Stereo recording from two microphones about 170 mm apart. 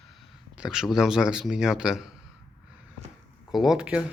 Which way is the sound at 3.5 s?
Centre (ahead or behind).